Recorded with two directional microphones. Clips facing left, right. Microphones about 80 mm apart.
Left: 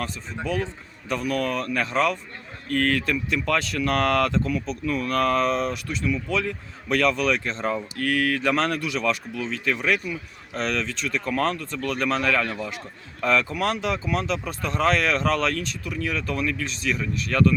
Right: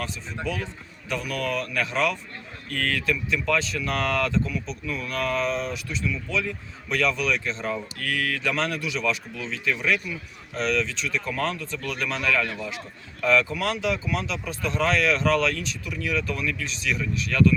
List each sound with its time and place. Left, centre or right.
0.5 s speech: left